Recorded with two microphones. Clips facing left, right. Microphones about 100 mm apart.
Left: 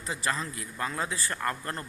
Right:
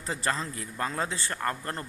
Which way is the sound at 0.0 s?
35° right (ahead or behind).